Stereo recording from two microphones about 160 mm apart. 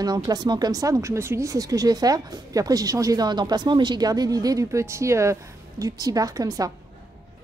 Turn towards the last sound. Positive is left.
turn(degrees=-20)  # may be behind; listen again after turning